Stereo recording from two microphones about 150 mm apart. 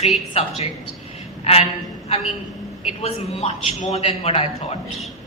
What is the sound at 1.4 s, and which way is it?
Speech, 40° left (ahead or behind).